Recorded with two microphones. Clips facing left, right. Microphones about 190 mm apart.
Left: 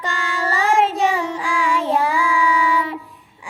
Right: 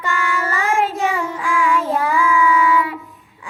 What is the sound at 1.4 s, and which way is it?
Child singing, 30° left (ahead or behind).